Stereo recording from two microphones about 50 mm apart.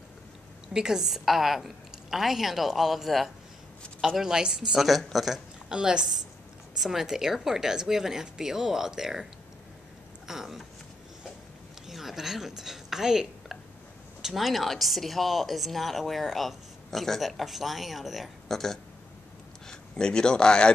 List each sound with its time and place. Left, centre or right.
0.7 s a woman's voice: centre
4.2 s speech: centre
4.8 s speech: centre
6.8 s speech: centre
11.9 s a woman's voice: centre
19.7 s speech: centre